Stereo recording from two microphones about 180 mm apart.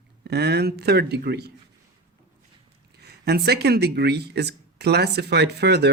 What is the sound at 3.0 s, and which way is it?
Speech, 65° right (ahead or behind).